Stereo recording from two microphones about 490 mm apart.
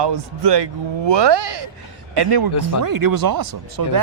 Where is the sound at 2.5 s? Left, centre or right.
Left.